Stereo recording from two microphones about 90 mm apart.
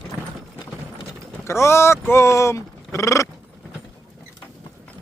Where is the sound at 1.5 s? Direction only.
30° left (ahead or behind).